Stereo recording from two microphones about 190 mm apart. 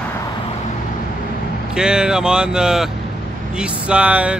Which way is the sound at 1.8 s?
5° right (ahead or behind).